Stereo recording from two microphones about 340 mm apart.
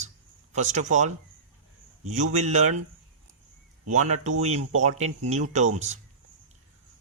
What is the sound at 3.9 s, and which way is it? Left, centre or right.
Speech, right.